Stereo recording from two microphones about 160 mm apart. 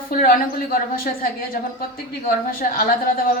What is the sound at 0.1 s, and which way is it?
A woman's voice, 65° left (ahead or behind).